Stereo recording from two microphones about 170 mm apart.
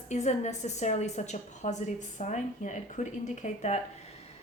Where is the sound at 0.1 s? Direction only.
45° left (ahead or behind).